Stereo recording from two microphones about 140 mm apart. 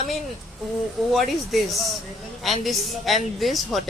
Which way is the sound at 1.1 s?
Centre (ahead or behind).